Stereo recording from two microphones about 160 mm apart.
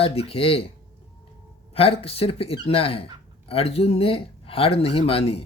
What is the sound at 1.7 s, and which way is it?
Speech, 35° left (ahead or behind).